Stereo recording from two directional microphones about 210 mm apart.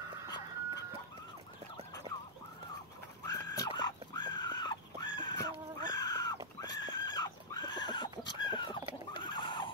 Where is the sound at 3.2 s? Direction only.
15° left (ahead or behind).